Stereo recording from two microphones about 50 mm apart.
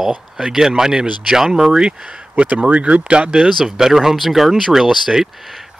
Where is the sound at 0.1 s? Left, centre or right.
Centre.